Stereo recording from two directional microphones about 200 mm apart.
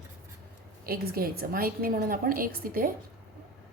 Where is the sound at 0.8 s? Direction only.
50° right (ahead or behind).